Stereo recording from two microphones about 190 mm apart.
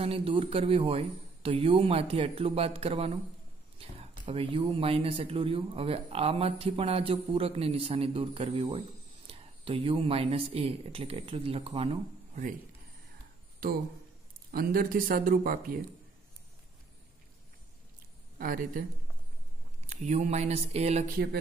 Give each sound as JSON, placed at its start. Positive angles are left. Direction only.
{"t": 0.0, "sound": "a man's voice", "side_deg": -30}
{"t": 4.3, "sound": "speech", "side_deg": -30}
{"t": 13.6, "sound": "speech", "side_deg": -50}
{"t": 18.4, "sound": "speech", "side_deg": -45}
{"t": 19.9, "sound": "a man's voice", "side_deg": -40}